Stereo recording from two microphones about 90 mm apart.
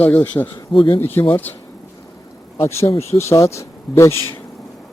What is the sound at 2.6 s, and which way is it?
Speech, 30° left (ahead or behind).